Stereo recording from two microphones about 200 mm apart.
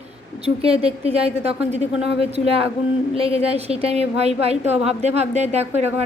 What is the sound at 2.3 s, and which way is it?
A woman's voice, 30° right (ahead or behind).